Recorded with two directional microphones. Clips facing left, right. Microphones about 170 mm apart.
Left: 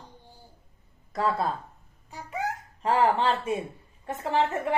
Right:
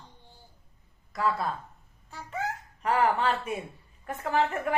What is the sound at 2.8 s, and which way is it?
A woman's voice, 30° left (ahead or behind).